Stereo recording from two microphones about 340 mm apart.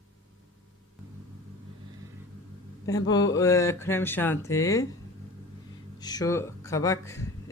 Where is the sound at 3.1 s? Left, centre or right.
Centre.